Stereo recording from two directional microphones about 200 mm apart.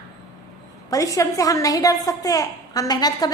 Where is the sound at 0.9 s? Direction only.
15° left (ahead or behind).